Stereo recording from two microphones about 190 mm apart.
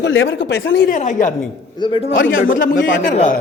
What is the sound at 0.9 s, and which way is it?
Speech, 40° left (ahead or behind).